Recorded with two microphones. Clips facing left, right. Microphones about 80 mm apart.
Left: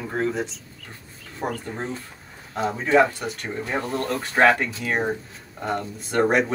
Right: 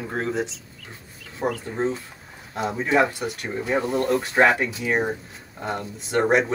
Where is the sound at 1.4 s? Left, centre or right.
Centre.